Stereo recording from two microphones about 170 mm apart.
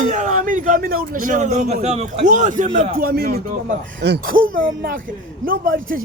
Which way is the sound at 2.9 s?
65° right (ahead or behind).